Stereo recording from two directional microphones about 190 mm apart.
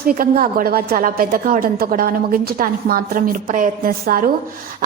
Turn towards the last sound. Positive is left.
turn(degrees=-50)  # may be behind; listen again after turning